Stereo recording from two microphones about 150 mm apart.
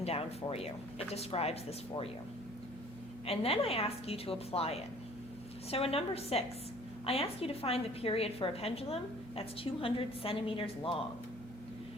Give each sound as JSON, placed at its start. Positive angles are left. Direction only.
{"t": 0.0, "sound": "speech", "side_deg": 40}
{"t": 3.2, "sound": "a woman's voice", "side_deg": 40}
{"t": 5.7, "sound": "a woman's voice", "side_deg": 40}